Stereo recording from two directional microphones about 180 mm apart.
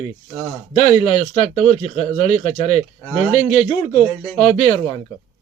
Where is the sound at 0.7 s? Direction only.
35° left (ahead or behind).